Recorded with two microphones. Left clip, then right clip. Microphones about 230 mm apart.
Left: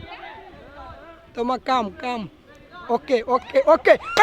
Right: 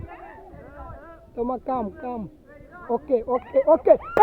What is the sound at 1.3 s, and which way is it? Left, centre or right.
Speech, left.